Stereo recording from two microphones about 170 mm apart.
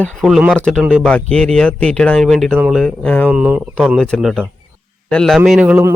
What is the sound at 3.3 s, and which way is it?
A man's voice, 10° right (ahead or behind).